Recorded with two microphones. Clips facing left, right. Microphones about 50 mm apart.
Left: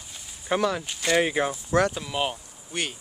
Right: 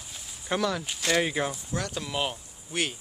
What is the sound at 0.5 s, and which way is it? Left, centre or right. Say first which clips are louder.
Speech: left 3 dB; centre.